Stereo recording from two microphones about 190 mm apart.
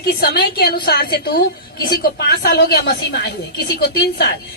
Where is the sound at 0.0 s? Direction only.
55° left (ahead or behind).